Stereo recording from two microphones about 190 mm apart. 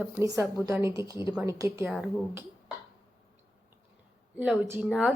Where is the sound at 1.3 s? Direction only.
15° right (ahead or behind).